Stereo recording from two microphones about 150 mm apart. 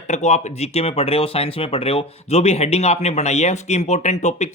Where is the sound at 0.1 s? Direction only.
50° left (ahead or behind).